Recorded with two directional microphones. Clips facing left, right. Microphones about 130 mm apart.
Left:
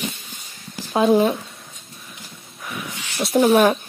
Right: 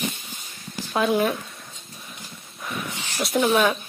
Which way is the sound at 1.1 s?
25° left (ahead or behind).